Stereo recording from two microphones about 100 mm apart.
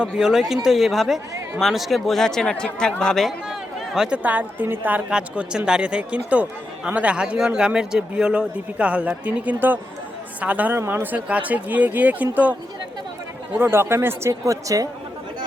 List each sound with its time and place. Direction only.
0.0 s speech: 5° right (ahead or behind)
13.6 s speech: 25° right (ahead or behind)